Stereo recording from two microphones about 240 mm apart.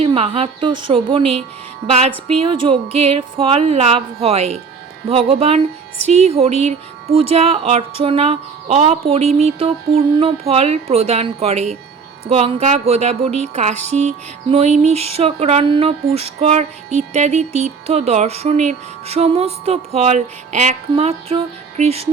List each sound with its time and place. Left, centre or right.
0.0 s music: right